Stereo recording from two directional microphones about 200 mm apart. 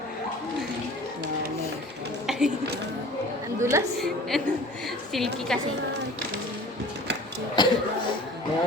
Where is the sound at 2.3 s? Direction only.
Centre (ahead or behind).